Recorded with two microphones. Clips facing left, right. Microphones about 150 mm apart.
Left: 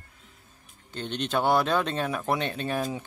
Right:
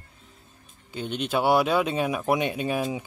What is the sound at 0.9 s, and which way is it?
Speech, 5° right (ahead or behind).